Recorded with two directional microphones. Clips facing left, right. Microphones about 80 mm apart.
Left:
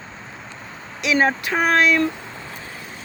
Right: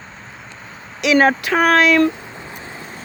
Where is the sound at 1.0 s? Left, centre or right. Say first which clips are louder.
Right 5 dB; right.